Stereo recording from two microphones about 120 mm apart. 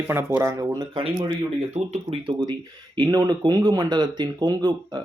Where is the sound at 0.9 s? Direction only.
45° right (ahead or behind).